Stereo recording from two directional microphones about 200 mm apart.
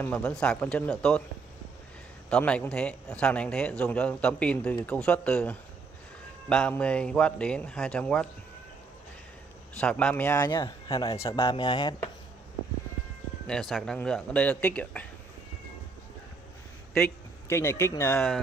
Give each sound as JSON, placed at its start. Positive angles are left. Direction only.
{"t": 0.0, "sound": "a man's voice", "side_deg": 5}
{"t": 2.2, "sound": "a man's voice", "side_deg": 5}
{"t": 9.8, "sound": "speech", "side_deg": 5}
{"t": 10.5, "sound": "speech", "side_deg": 25}
{"t": 13.5, "sound": "speech", "side_deg": 0}
{"t": 16.9, "sound": "a man's voice", "side_deg": 10}